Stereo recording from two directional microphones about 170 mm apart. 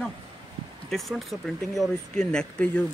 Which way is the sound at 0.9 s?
Centre (ahead or behind).